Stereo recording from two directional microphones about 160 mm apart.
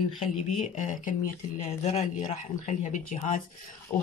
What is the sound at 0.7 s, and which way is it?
Speech, 55° left (ahead or behind).